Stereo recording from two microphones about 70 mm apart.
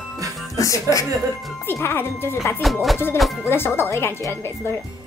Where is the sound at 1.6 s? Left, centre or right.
Left.